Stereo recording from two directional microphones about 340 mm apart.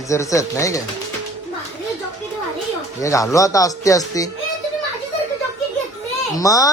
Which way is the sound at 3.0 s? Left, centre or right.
Centre.